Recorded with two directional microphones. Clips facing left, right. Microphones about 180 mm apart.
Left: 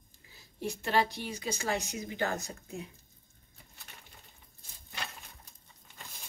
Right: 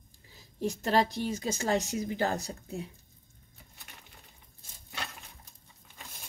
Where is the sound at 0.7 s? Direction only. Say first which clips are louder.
Right 3 dB; 40° right (ahead or behind).